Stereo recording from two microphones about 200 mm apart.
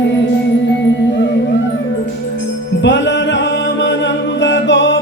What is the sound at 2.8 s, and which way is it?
Music, 65° left (ahead or behind).